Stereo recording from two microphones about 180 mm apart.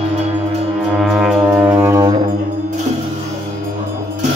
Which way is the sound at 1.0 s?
5° right (ahead or behind).